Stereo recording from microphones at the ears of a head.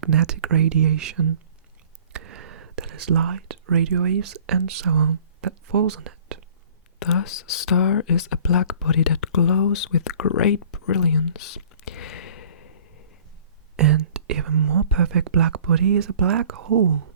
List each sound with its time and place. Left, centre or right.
0.0 s speech: right
7.0 s speech: left
13.7 s speech: right